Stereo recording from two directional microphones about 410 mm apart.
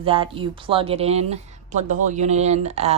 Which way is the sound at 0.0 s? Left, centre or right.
Centre.